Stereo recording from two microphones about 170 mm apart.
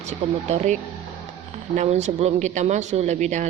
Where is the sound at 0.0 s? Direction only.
40° right (ahead or behind).